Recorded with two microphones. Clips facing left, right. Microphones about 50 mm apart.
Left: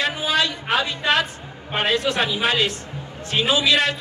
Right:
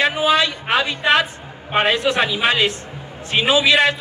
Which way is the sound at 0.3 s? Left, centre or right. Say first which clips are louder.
Right 4 dB; right.